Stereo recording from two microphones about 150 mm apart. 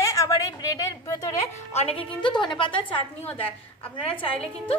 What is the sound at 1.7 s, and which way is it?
Speech, 45° left (ahead or behind).